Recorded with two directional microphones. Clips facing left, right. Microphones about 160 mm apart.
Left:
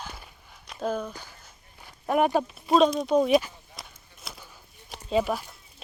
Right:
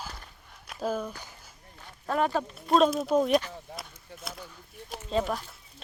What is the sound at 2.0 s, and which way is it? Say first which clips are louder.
Speech: left 4 dB; 15° left (ahead or behind).